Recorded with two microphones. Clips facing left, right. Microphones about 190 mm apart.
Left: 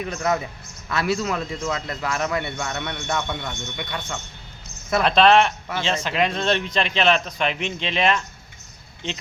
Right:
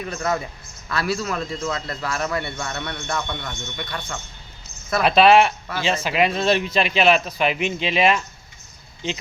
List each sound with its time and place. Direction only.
0.1 s a man's voice: 15° left (ahead or behind)
4.9 s speech: 5° right (ahead or behind)